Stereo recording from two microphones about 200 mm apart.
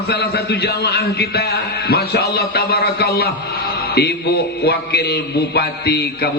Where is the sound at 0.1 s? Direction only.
55° left (ahead or behind).